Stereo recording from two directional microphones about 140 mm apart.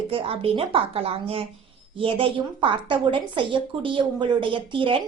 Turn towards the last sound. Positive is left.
turn(degrees=-35)  # may be behind; listen again after turning